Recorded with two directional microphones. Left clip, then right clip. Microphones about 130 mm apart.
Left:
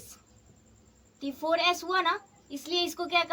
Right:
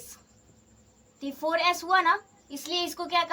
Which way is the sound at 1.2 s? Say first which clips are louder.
Right 1 dB; 15° right (ahead or behind).